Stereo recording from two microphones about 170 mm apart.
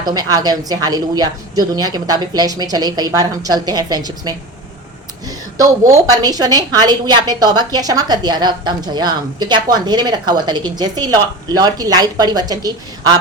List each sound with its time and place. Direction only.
0.0 s a woman's voice: 25° right (ahead or behind)
5.5 s a woman's voice: 20° right (ahead or behind)